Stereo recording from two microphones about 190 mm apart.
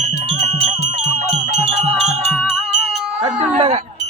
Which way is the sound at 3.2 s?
35° right (ahead or behind).